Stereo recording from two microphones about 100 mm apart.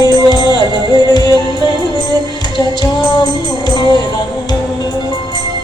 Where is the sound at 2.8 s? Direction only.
45° left (ahead or behind).